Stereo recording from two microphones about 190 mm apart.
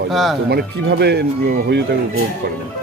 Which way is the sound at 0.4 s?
60° right (ahead or behind).